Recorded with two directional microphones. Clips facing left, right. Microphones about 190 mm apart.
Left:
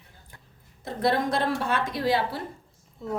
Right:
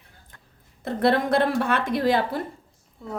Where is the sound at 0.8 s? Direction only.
60° right (ahead or behind).